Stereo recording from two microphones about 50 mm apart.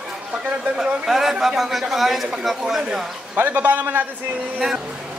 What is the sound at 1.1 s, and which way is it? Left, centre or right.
A man's voice, centre.